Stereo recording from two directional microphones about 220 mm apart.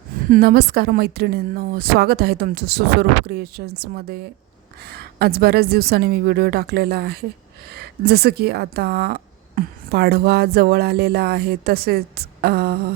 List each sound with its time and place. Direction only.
0.3 s speech: 45° right (ahead or behind)